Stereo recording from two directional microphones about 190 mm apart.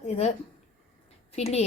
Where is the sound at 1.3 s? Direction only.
35° left (ahead or behind).